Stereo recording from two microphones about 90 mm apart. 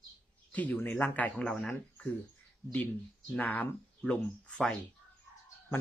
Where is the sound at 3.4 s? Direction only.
20° left (ahead or behind).